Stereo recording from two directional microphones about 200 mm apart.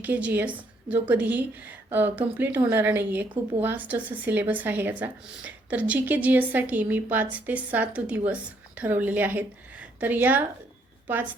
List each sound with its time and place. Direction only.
0.0 s speech: 10° right (ahead or behind)